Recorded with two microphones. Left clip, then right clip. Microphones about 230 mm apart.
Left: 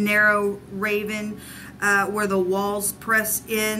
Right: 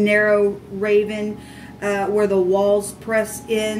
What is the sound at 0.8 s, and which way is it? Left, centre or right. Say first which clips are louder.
Speech: right 7 dB; left.